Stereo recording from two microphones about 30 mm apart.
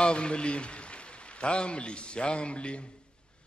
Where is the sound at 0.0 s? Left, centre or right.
Left.